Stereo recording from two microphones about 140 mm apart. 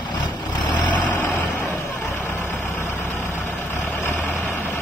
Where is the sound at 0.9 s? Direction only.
15° left (ahead or behind).